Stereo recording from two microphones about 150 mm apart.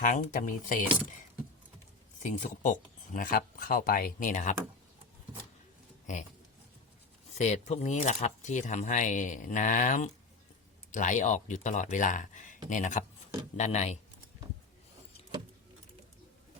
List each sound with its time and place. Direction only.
0.0 s speech: 60° left (ahead or behind)
2.2 s speech: 55° left (ahead or behind)
7.3 s speech: 50° left (ahead or behind)